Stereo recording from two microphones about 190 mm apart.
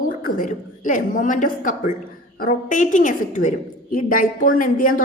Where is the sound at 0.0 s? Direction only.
45° left (ahead or behind).